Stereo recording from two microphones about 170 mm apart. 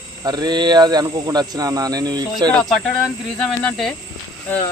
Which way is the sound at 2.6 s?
Centre (ahead or behind).